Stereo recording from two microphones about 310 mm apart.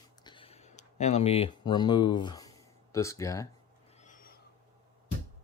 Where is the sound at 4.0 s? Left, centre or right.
Left.